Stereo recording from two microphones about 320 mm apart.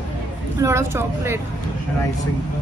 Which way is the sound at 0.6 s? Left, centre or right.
Centre.